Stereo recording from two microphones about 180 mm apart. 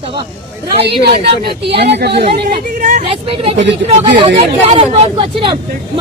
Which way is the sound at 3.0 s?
30° right (ahead or behind).